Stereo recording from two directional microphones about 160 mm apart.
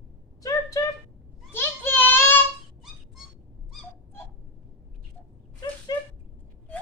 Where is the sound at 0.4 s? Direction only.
20° left (ahead or behind).